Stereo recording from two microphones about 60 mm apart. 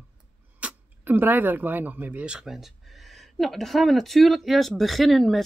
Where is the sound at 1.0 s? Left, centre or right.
Right.